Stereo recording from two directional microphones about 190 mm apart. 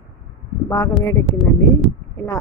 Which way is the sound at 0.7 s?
15° left (ahead or behind).